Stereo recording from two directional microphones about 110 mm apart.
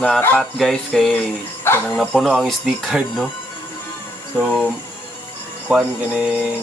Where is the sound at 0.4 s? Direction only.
Centre (ahead or behind).